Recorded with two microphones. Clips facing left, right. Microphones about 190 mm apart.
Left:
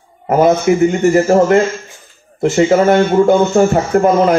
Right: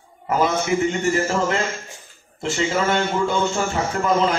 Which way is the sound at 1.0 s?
55° left (ahead or behind).